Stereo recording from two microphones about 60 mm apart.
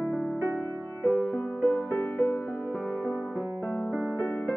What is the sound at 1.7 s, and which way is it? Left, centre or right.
Music, left.